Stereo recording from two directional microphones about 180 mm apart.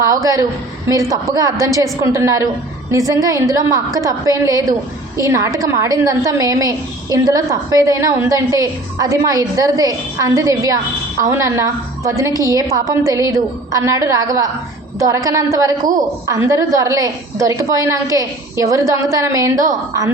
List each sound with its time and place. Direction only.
0.0 s a woman's voice: 20° right (ahead or behind)